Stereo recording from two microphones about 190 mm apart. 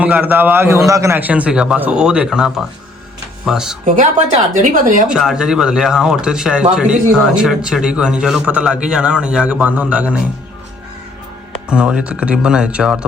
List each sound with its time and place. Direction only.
0.0 s a man's voice: 10° right (ahead or behind)
4.5 s speech: 40° right (ahead or behind)
5.0 s a man's voice: 5° right (ahead or behind)
11.7 s a man's voice: 5° right (ahead or behind)